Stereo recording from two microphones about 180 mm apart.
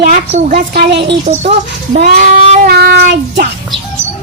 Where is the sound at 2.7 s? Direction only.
65° right (ahead or behind).